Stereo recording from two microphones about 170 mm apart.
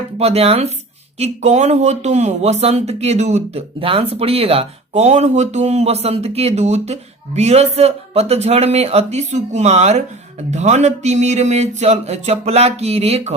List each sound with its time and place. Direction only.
0.2 s speech: 35° right (ahead or behind)